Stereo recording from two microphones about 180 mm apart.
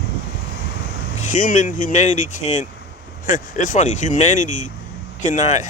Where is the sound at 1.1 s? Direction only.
45° left (ahead or behind).